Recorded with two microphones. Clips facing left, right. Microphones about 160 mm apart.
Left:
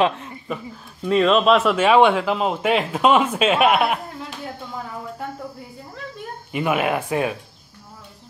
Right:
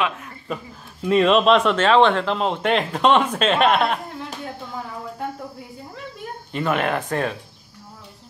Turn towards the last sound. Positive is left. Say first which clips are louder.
# left 2 dB
turn(degrees=10)  # may be behind; listen again after turning